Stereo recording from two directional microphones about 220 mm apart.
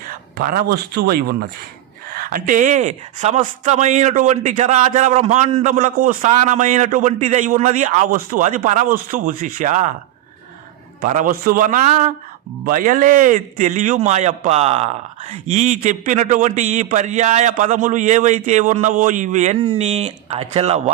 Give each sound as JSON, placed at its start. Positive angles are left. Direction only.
{"t": 0.1, "sound": "a man's voice", "side_deg": -40}
{"t": 11.0, "sound": "speech", "side_deg": -35}